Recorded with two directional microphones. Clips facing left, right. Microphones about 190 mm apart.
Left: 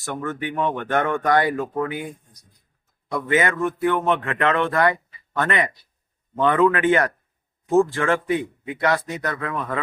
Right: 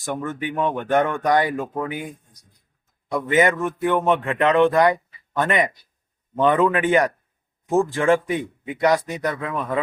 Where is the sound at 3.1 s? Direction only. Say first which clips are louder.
Right 3 dB; 15° right (ahead or behind).